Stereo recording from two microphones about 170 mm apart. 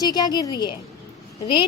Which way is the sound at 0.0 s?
25° left (ahead or behind).